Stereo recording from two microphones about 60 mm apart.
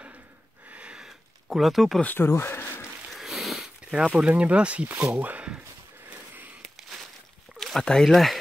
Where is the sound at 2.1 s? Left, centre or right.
Left.